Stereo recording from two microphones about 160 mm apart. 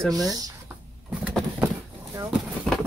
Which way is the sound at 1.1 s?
5° right (ahead or behind).